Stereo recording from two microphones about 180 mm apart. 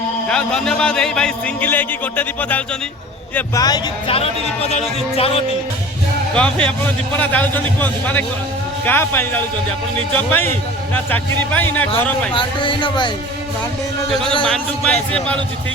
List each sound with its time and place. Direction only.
0.3 s a man's voice: 5° left (ahead or behind)
3.3 s a man's voice: 20° left (ahead or behind)
6.3 s a man's voice: 5° left (ahead or behind)
12.3 s speech: 30° left (ahead or behind)
14.1 s a man's voice: 5° left (ahead or behind)